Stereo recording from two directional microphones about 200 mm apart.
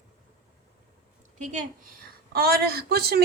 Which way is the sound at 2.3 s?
50° right (ahead or behind).